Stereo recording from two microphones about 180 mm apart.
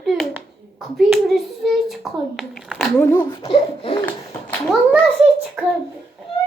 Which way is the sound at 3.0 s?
15° left (ahead or behind).